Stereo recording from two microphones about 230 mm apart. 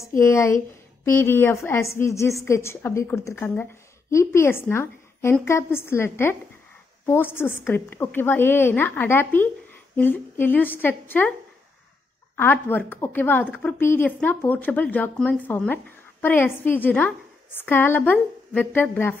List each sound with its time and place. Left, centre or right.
0.0 s a woman's voice: centre
12.4 s a woman's voice: centre